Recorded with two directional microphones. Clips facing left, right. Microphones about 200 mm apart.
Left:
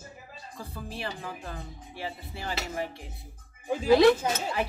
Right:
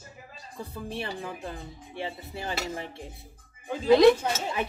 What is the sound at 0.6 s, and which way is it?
Speech, 25° right (ahead or behind).